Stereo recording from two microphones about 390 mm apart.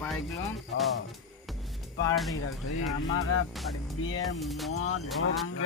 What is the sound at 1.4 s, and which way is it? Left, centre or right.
Music, centre.